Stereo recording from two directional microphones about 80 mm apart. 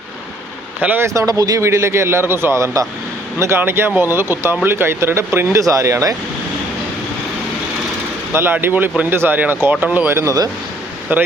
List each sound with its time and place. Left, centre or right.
0.8 s speech: right
1.0 s speech: right
1.3 s speech: right
1.6 s speech: right
8.3 s speech: right